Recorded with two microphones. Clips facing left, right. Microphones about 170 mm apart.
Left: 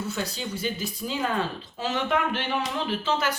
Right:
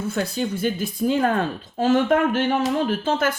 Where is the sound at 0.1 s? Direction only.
50° right (ahead or behind).